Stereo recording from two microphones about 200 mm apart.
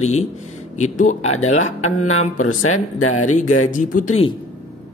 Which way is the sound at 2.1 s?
90° left.